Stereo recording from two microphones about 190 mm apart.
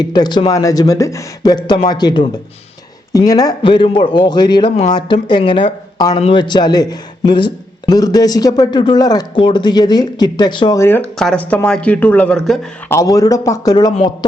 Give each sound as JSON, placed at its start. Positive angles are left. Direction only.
{"t": 0.0, "sound": "a man's voice", "side_deg": 20}
{"t": 4.7, "sound": "speech", "side_deg": 35}
{"t": 4.9, "sound": "a man's voice", "side_deg": 25}